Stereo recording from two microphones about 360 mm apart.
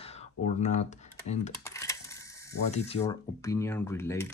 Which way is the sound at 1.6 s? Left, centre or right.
Centre.